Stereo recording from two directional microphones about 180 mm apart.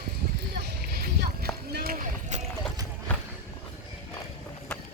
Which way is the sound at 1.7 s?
55° right (ahead or behind).